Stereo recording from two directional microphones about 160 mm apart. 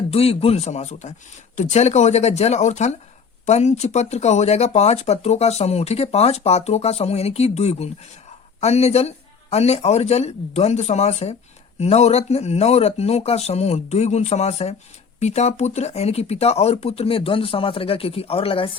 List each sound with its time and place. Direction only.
0.1 s speech: 40° left (ahead or behind)